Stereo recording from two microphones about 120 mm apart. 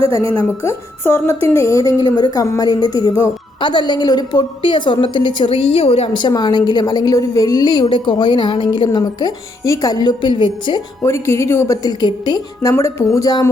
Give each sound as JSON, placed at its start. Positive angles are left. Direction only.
{"t": 0.6, "sound": "a woman's voice", "side_deg": 25}
{"t": 6.1, "sound": "a woman's voice", "side_deg": 35}
{"t": 11.0, "sound": "a woman's voice", "side_deg": 25}
{"t": 12.7, "sound": "a woman's voice", "side_deg": 25}